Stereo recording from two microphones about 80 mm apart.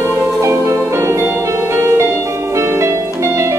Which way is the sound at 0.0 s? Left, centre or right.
Right.